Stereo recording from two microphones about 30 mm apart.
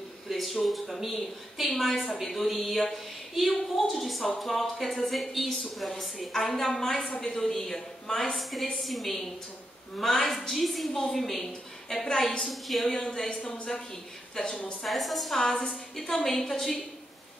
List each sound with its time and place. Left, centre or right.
0.3 s a woman's voice: centre
8.4 s a woman's voice: centre
13.0 s a woman's voice: centre
14.4 s a woman's voice: left
14.9 s speech: centre
15.3 s a woman's voice: centre